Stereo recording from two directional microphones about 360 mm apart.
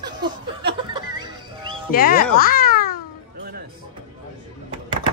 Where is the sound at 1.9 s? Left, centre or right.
Left.